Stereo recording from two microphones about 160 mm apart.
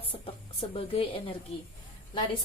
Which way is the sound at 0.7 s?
35° left (ahead or behind).